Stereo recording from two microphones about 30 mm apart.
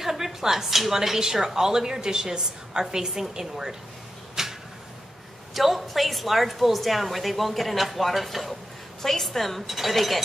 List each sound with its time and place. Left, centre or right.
0.0 s a woman's voice: centre
4.4 s a sound: centre
5.5 s a woman's voice: centre